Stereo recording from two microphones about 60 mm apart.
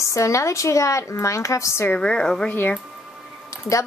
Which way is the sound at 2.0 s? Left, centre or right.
Centre.